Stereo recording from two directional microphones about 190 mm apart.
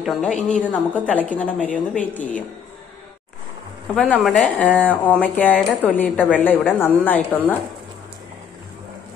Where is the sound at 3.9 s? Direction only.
5° left (ahead or behind).